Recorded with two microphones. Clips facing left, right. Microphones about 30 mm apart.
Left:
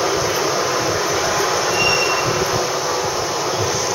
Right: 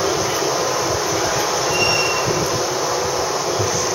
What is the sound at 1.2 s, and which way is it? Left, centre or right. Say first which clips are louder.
Train: left 1 dB; centre.